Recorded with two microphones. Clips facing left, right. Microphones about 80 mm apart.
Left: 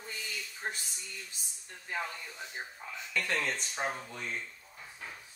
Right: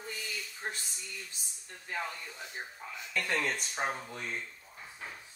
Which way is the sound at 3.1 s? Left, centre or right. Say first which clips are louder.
Right 1 dB; centre.